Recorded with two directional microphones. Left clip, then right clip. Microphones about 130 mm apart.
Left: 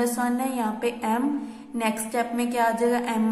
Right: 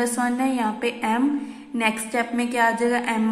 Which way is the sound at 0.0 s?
15° right (ahead or behind).